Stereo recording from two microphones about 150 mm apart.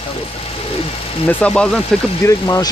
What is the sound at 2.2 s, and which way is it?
Speech, 20° left (ahead or behind).